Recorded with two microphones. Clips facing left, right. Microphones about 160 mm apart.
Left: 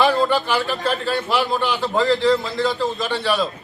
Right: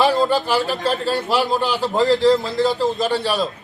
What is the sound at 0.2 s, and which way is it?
A man's voice, 40° right (ahead or behind).